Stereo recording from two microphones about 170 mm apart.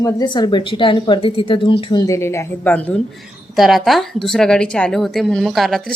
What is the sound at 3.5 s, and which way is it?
A woman's voice, centre (ahead or behind).